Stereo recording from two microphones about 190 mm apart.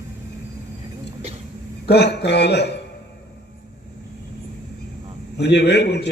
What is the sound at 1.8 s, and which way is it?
Speech, 60° left (ahead or behind).